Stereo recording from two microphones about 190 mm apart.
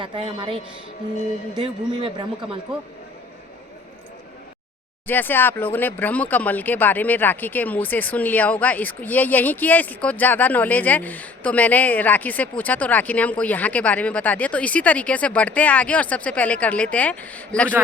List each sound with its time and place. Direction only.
0.0 s speech: 25° right (ahead or behind)
1.9 s speech: 25° right (ahead or behind)
5.0 s speech: 10° left (ahead or behind)